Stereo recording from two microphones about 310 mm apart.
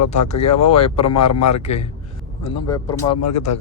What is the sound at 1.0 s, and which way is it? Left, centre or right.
Speech, left.